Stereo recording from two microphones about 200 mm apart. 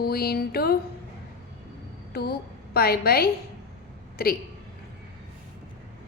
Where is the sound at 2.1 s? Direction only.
50° left (ahead or behind).